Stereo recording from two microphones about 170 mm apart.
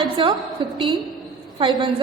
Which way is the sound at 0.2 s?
30° right (ahead or behind).